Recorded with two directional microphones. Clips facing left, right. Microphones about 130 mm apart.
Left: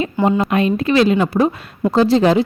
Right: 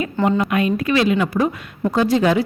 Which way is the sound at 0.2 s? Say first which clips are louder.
Left 2 dB; 25° left (ahead or behind).